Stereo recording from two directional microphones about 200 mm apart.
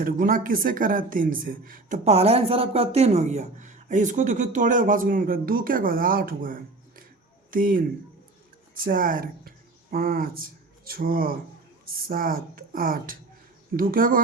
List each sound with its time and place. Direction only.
0.0 s speech: 45° right (ahead or behind)